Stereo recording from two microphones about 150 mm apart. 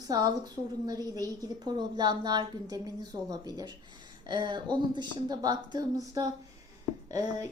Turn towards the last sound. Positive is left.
turn(degrees=-20)  # may be behind; listen again after turning